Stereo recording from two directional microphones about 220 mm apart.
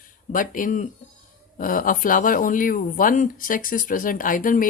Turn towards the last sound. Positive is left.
turn(degrees=40)  # may be behind; listen again after turning